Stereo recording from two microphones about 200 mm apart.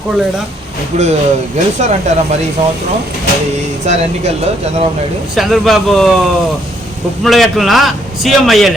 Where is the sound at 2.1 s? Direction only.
35° right (ahead or behind).